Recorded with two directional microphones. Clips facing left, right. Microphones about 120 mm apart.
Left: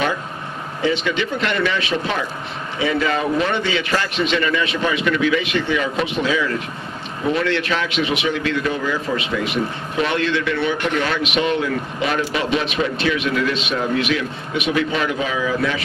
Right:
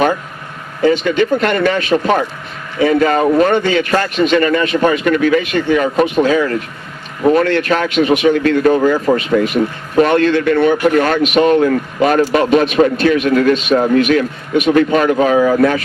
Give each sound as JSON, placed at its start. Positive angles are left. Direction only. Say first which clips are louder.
{"t": 0.8, "sound": "a man's voice", "louder": "right 8 dB", "side_deg": -45}